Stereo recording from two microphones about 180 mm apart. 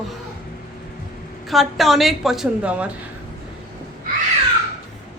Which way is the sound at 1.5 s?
Centre (ahead or behind).